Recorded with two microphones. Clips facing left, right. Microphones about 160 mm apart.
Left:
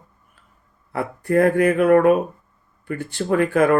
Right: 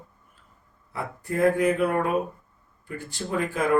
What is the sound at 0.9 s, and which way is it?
Speech, 65° left (ahead or behind).